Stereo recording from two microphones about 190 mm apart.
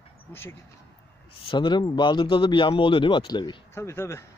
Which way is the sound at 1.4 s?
25° left (ahead or behind).